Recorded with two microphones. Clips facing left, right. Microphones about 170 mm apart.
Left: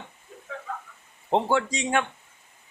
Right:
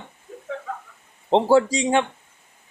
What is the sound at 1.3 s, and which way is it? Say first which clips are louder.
Speech: right 7 dB; 35° right (ahead or behind).